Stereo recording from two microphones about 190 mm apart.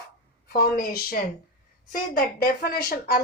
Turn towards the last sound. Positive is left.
turn(degrees=55)  # may be behind; listen again after turning